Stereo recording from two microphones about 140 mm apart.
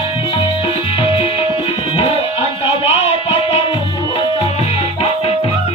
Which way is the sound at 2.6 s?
45° left (ahead or behind).